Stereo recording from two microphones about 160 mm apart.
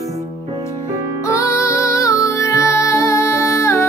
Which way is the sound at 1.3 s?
20° left (ahead or behind).